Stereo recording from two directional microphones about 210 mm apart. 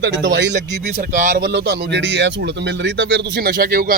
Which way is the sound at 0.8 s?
40° right (ahead or behind).